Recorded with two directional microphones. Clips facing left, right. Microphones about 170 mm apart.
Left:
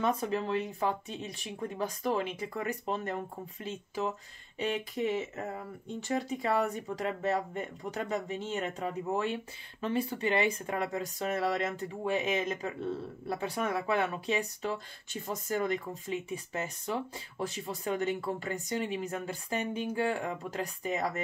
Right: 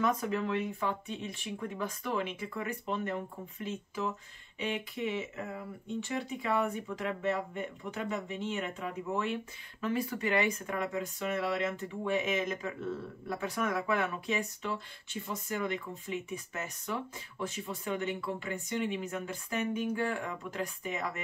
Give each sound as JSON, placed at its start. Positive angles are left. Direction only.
{"t": 0.0, "sound": "speech", "side_deg": 30}